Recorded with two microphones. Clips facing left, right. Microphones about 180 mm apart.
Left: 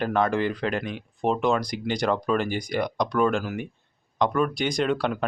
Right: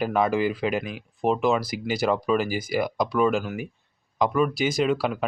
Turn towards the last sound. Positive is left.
turn(degrees=-5)  # may be behind; listen again after turning